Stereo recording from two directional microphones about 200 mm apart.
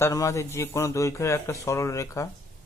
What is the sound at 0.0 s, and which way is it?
Speech, 15° left (ahead or behind).